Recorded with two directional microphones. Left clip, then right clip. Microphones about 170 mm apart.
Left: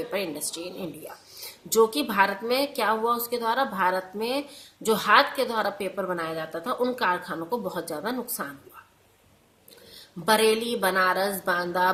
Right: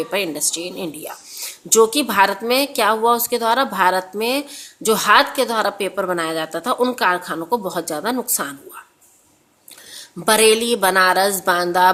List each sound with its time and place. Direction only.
0.1 s a woman's voice: 40° right (ahead or behind)
10.2 s a woman's voice: 40° right (ahead or behind)